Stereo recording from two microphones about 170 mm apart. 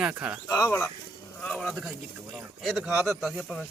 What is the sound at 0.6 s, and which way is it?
Speech, 15° left (ahead or behind).